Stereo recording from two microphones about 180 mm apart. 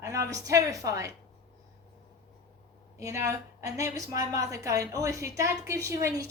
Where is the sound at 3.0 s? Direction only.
15° right (ahead or behind).